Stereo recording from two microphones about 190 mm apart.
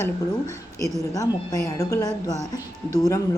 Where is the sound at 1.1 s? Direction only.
15° left (ahead or behind).